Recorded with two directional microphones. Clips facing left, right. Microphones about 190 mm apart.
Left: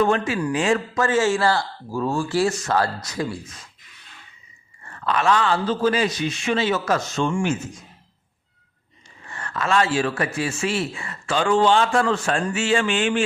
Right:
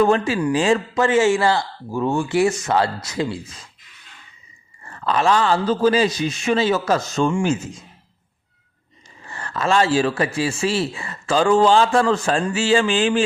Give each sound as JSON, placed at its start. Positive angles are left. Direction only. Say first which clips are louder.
{"t": 0.0, "sound": "speech", "louder": "right 3 dB", "side_deg": -30}
{"t": 1.0, "sound": "speech", "louder": "right 3 dB", "side_deg": -15}
{"t": 4.9, "sound": "speech", "louder": "right 2 dB", "side_deg": -30}
{"t": 9.2, "sound": "speech", "louder": "right 4 dB", "side_deg": -30}